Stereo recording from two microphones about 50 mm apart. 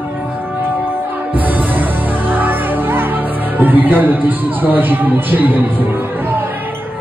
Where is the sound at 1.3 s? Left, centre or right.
Right.